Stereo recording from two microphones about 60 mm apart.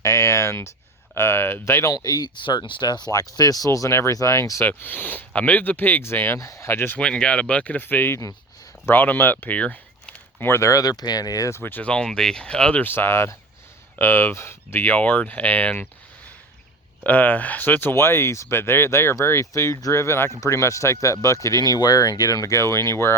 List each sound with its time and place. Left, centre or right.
0.0 s speech: left
1.9 s speech: left
4.6 s speech: left
6.4 s speech: left
6.7 s speech: left
7.0 s speech: centre
10.4 s speech: left
10.7 s speech: left
11.5 s speech: left
11.9 s speech: centre
12.8 s speech: left
17.0 s speech: left